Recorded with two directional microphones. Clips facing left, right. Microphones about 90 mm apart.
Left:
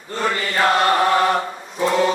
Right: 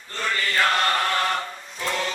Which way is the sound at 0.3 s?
25° left (ahead or behind).